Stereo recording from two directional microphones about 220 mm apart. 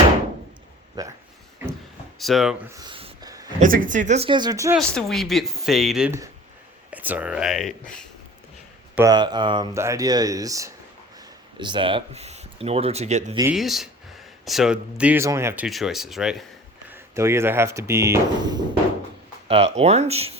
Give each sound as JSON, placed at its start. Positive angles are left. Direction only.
{"t": 1.0, "sound": "speech", "side_deg": -15}
{"t": 2.1, "sound": "speech", "side_deg": 0}
{"t": 2.6, "sound": "a sound", "side_deg": -15}
{"t": 3.6, "sound": "speech", "side_deg": -35}
{"t": 4.8, "sound": "speech", "side_deg": 5}
{"t": 9.0, "sound": "speech", "side_deg": -20}
{"t": 13.5, "sound": "speech", "side_deg": 0}
{"t": 16.9, "sound": "speech", "side_deg": -10}
{"t": 19.5, "sound": "speech", "side_deg": -25}